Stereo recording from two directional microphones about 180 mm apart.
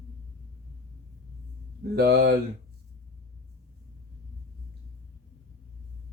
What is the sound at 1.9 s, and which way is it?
Speech, 65° right (ahead or behind).